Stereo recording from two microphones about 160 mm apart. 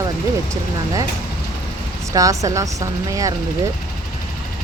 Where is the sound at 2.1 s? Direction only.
20° right (ahead or behind).